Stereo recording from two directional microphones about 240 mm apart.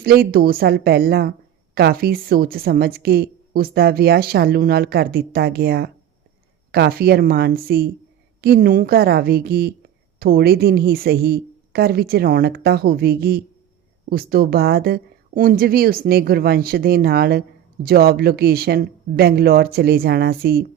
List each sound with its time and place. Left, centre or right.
0.0 s a woman's voice: right